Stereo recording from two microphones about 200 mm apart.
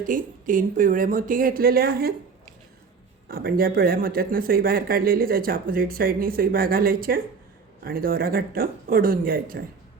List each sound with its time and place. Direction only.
0.1 s speech: 40° right (ahead or behind)
3.2 s speech: 45° right (ahead or behind)